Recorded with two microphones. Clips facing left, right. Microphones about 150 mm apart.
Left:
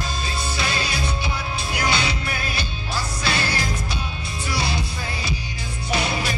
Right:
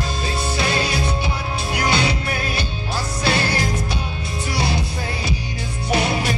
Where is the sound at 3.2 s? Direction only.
50° right (ahead or behind).